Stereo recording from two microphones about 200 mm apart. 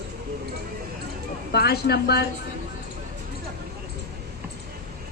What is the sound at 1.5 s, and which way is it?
Speech, 55° left (ahead or behind).